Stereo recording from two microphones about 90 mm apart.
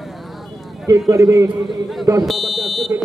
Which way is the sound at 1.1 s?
35° right (ahead or behind).